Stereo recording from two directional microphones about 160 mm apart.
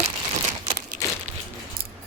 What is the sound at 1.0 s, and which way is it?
Crumpling, 20° left (ahead or behind).